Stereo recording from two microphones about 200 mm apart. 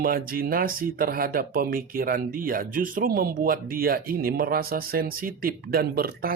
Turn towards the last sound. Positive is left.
turn(degrees=-50)  # may be behind; listen again after turning